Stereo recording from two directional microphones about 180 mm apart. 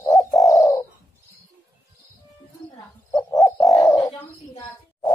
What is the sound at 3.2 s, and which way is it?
Bird, 20° left (ahead or behind).